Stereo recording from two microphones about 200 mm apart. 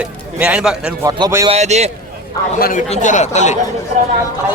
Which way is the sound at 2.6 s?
45° left (ahead or behind).